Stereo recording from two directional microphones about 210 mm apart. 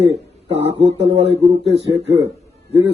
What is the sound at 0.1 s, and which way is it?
A man's voice, 30° right (ahead or behind).